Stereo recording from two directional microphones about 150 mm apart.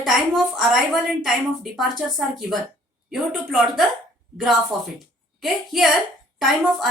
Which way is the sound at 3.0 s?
Centre (ahead or behind).